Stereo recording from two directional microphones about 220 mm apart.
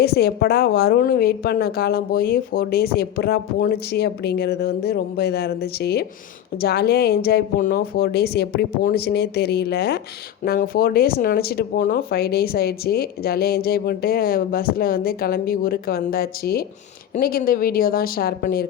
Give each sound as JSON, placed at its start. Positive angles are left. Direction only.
{"t": 0.0, "sound": "a woman's voice", "side_deg": 45}